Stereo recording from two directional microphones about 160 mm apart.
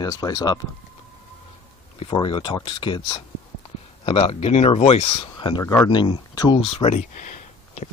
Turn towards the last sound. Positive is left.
turn(degrees=45)  # may be behind; listen again after turning